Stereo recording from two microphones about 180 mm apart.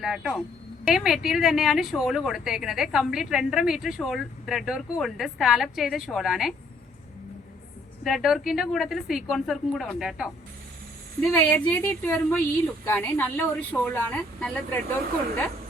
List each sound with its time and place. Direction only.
0.0 s speech: centre (ahead or behind)
8.0 s speech: centre (ahead or behind)
11.3 s speech: 5° left (ahead or behind)